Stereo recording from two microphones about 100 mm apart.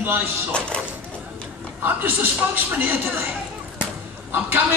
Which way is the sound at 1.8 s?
20° right (ahead or behind).